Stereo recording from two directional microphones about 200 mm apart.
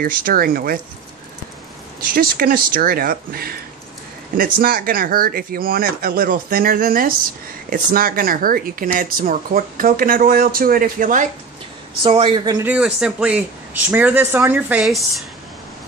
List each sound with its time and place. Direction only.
0.0 s speech: 45° right (ahead or behind)
2.1 s speech: 45° right (ahead or behind)
4.6 s speech: 45° right (ahead or behind)
12.0 s a woman's voice: 25° right (ahead or behind)
12.5 s speech: 5° right (ahead or behind)